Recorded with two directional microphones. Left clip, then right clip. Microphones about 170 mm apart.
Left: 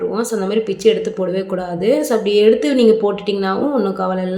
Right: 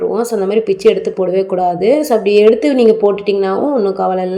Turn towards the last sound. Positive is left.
turn(degrees=-10)  # may be behind; listen again after turning